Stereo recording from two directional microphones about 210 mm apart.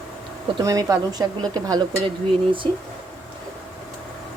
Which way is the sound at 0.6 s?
15° right (ahead or behind).